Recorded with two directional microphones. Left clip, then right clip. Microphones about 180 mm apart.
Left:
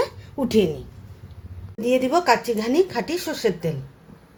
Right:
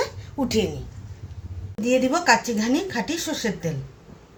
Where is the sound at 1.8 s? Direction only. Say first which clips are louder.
Left 1 dB; 45° left (ahead or behind).